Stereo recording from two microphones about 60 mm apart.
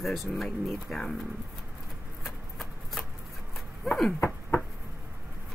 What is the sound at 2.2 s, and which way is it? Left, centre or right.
Shuffling cards, centre.